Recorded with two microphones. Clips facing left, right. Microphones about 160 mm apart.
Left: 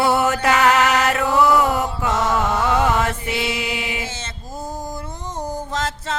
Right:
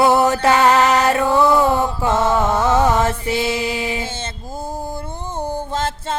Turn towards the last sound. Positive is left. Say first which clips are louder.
# right 2 dB
turn(degrees=-30)  # may be behind; listen again after turning